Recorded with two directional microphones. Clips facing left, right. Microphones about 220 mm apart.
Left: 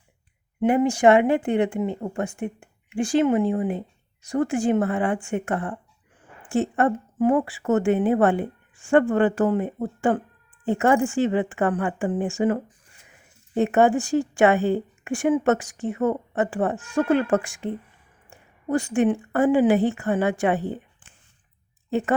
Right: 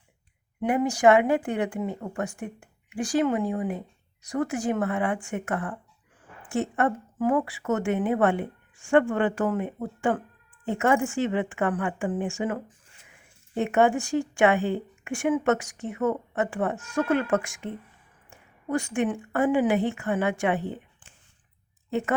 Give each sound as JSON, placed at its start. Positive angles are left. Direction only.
{"t": 0.6, "sound": "a woman's voice", "side_deg": 25}
{"t": 13.6, "sound": "a woman's voice", "side_deg": 35}
{"t": 21.8, "sound": "speech", "side_deg": 35}